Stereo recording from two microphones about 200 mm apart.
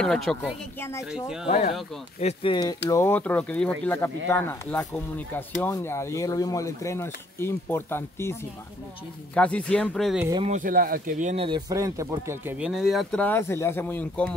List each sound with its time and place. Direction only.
0.0 s speech: centre (ahead or behind)
0.7 s speech: 10° left (ahead or behind)
2.1 s speech: 30° left (ahead or behind)
2.9 s speech: 10° left (ahead or behind)
10.4 s speech: 40° right (ahead or behind)
11.4 s speech: 20° right (ahead or behind); by 14.3 s 10° left (ahead or behind)